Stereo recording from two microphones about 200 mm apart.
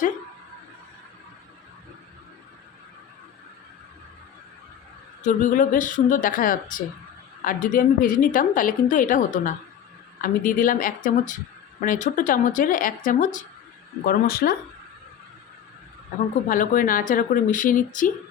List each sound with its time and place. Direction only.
5.2 s a woman's voice: 40° left (ahead or behind)
16.5 s a woman's voice: 40° left (ahead or behind)